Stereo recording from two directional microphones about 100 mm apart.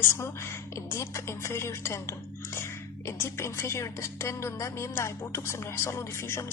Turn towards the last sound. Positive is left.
turn(degrees=30)  # may be behind; listen again after turning